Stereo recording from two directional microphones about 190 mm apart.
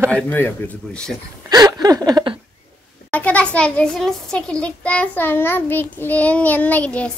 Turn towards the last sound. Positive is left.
turn(degrees=5)  # may be behind; listen again after turning